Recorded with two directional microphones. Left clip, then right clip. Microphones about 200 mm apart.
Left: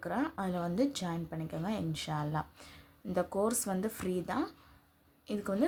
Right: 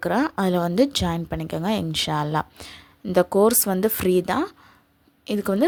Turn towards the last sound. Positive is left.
turn(degrees=-40)  # may be behind; listen again after turning